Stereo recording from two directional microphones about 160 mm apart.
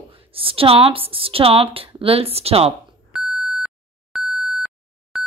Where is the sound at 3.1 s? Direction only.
Centre (ahead or behind).